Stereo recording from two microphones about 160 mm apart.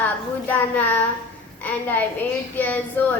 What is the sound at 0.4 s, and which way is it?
A woman's voice, 10° left (ahead or behind).